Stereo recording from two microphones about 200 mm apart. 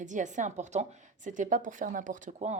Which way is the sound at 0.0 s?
40° right (ahead or behind).